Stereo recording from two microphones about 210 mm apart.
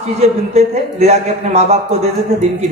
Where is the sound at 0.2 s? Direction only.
30° right (ahead or behind).